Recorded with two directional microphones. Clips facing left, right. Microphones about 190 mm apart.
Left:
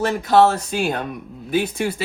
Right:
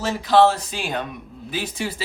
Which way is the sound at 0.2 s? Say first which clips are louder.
Even; 50° left (ahead or behind).